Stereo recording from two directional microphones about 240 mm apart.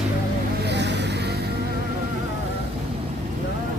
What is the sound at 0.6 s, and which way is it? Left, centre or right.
Vehicle, right.